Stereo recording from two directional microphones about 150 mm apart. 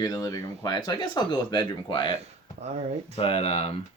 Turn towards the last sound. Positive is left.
turn(degrees=40)  # may be behind; listen again after turning